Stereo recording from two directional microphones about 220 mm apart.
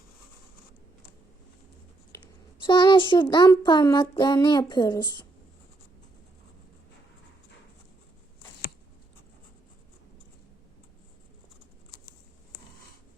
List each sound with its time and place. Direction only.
2.1 s a child's voice: 20° left (ahead or behind)